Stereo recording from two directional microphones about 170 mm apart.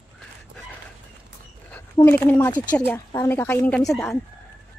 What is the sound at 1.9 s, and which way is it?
A woman's voice, 15° left (ahead or behind).